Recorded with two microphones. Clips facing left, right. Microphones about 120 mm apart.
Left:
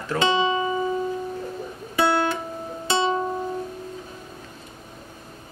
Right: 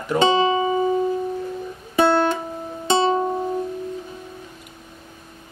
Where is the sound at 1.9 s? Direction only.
25° right (ahead or behind).